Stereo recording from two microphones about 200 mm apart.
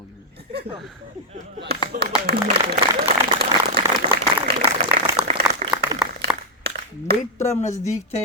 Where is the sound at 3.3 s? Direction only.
55° right (ahead or behind).